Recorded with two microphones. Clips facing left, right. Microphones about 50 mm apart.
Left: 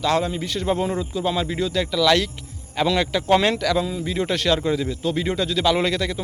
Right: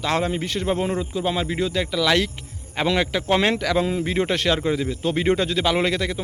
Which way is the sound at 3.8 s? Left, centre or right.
Right.